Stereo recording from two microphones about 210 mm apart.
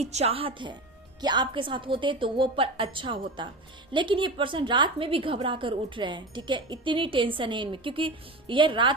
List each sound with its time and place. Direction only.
0.0 s a woman's voice: 30° right (ahead or behind)